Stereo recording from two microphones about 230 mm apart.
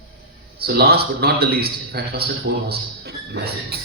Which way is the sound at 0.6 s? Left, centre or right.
Right.